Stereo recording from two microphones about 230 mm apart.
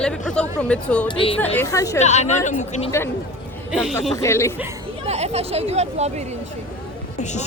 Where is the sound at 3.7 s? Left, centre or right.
Centre.